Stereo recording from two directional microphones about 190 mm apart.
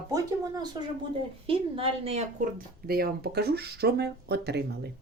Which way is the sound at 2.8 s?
55° right (ahead or behind).